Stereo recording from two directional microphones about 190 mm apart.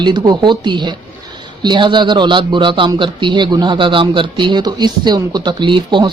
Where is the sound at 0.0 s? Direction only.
25° right (ahead or behind).